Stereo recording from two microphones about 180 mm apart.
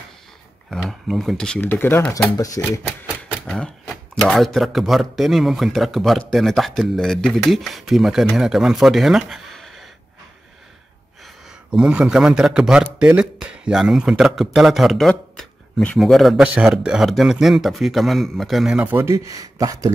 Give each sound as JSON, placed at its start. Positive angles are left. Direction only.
{"t": 0.7, "sound": "speech", "side_deg": 0}
{"t": 3.3, "sound": "speech", "side_deg": 5}
{"t": 11.7, "sound": "speech", "side_deg": -5}